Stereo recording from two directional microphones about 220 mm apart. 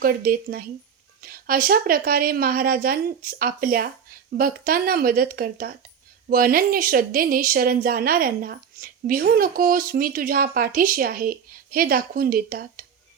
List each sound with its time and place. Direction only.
0.0 s speech: 40° right (ahead or behind)